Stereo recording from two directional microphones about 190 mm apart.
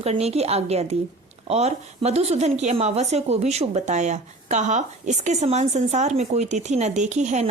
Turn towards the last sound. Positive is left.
turn(degrees=-35)  # may be behind; listen again after turning